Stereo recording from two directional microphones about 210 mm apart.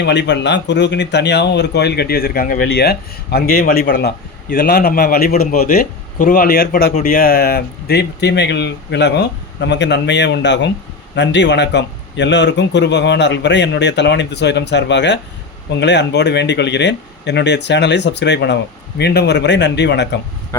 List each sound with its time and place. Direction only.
0.0 s speech: 55° left (ahead or behind)